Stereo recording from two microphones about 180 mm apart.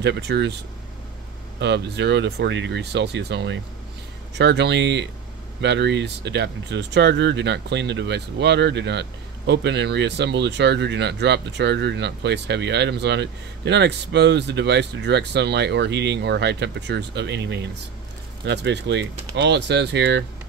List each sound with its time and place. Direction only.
0.0 s speech: 70° right (ahead or behind)
1.6 s speech: 70° right (ahead or behind)